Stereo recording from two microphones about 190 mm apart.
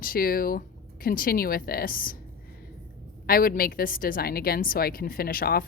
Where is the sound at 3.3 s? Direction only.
50° left (ahead or behind).